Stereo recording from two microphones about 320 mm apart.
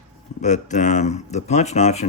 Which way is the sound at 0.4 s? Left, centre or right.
Left.